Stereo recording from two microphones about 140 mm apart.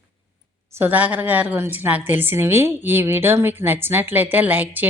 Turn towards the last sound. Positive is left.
turn(degrees=-15)  # may be behind; listen again after turning